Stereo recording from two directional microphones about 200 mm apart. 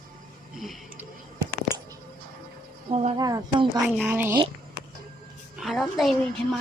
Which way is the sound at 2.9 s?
30° right (ahead or behind).